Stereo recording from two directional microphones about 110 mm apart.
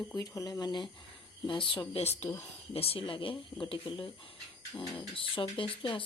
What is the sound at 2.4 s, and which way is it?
Speech, 60° left (ahead or behind).